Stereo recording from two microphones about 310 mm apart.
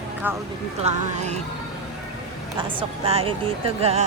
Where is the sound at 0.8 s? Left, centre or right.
Right.